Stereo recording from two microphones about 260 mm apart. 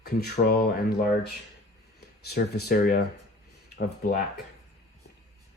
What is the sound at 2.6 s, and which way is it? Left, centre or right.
Speech, left.